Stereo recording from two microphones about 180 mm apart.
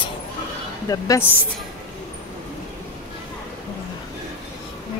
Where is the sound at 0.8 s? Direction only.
20° left (ahead or behind).